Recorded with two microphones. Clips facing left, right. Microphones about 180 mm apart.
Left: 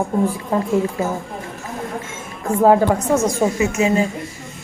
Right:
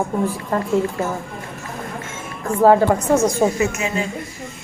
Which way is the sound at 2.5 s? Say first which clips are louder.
Even; centre (ahead or behind).